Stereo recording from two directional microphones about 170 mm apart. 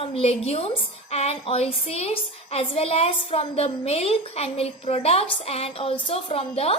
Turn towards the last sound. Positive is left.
turn(degrees=35)  # may be behind; listen again after turning